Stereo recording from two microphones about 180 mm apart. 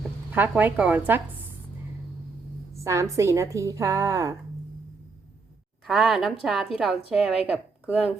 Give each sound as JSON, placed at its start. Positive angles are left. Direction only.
{"t": 0.3, "sound": "a woman's voice", "side_deg": -10}
{"t": 2.8, "sound": "a woman's voice", "side_deg": -15}
{"t": 5.8, "sound": "a woman's voice", "side_deg": 0}